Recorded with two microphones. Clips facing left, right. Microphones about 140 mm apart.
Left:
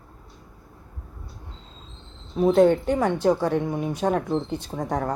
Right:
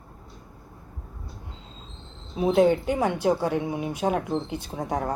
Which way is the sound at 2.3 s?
5° right (ahead or behind).